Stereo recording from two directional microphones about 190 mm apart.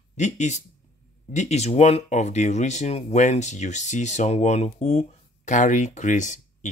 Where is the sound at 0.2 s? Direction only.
40° left (ahead or behind).